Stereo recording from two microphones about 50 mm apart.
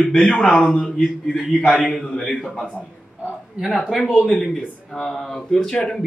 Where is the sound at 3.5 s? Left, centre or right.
Centre.